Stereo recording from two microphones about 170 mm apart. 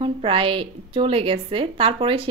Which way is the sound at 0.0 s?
30° right (ahead or behind).